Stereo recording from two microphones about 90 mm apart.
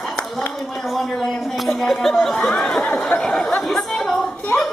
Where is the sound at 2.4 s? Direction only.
5° left (ahead or behind).